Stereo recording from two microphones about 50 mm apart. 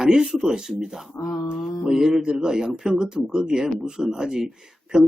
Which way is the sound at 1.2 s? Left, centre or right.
Left.